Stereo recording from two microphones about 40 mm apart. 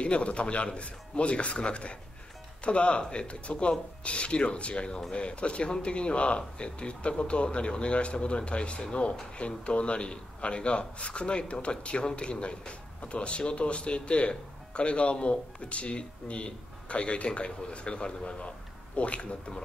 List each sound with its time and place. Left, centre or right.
0.0 s a man's voice: left